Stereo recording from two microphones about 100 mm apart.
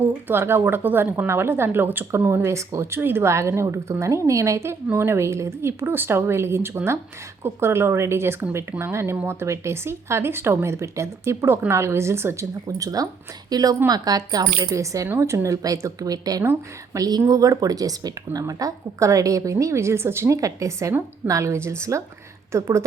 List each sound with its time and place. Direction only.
0.3 s a woman's voice: 25° right (ahead or behind)